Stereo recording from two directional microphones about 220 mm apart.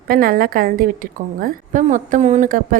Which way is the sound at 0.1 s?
40° right (ahead or behind).